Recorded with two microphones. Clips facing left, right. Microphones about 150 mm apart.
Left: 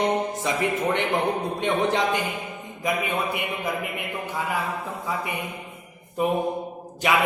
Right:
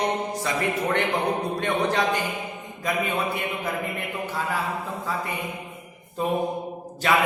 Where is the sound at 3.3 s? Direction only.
15° left (ahead or behind).